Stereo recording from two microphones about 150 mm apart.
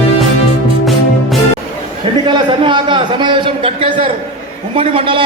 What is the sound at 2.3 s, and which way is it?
A man's voice, 35° right (ahead or behind).